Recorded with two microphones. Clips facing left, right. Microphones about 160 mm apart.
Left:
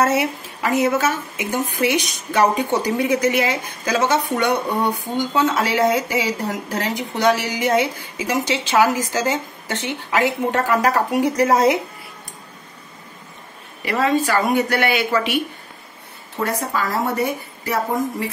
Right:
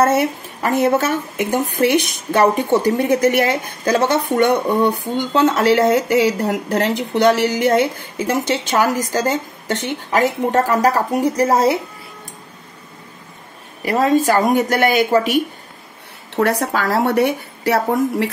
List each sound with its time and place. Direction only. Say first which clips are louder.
0.0 s a woman's voice: right 3 dB; 50° right (ahead or behind)
13.8 s a woman's voice: right 4 dB; 45° right (ahead or behind)
16.3 s a woman's voice: right 5 dB; 75° right (ahead or behind)